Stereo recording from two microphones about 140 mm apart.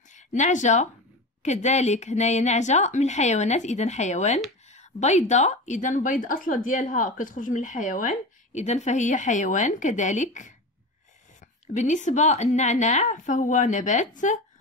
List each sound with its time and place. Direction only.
0.1 s speech: 60° left (ahead or behind)
11.6 s speech: 60° left (ahead or behind)